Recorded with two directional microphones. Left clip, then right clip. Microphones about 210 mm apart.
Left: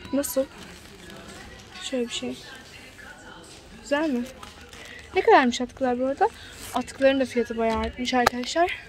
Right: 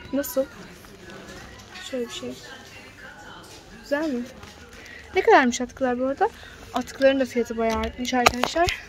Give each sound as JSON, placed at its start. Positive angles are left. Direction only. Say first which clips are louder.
{"t": 0.1, "sound": "a woman's voice", "louder": "even", "side_deg": 10}
{"t": 1.9, "sound": "a woman's voice", "louder": "left 2 dB", "side_deg": 30}
{"t": 3.9, "sound": "a woman's voice", "louder": "left 1 dB", "side_deg": 20}
{"t": 5.1, "sound": "speech", "louder": "right 1 dB", "side_deg": -5}